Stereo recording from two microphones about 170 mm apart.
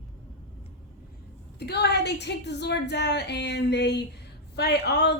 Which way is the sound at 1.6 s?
75° left (ahead or behind).